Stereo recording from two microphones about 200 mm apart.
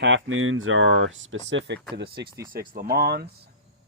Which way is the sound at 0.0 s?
70° right (ahead or behind).